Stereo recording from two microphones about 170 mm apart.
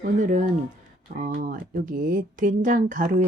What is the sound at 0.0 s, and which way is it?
Speech, 50° right (ahead or behind).